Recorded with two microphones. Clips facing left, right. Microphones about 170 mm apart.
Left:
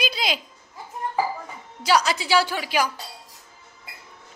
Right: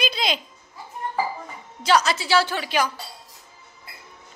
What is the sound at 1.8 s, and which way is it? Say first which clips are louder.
A woman's voice: right 1 dB; 10° left (ahead or behind).